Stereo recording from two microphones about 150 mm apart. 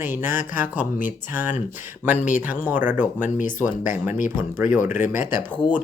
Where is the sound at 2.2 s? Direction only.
55° left (ahead or behind).